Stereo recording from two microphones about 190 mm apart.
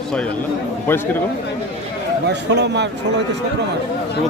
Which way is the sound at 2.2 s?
65° right (ahead or behind).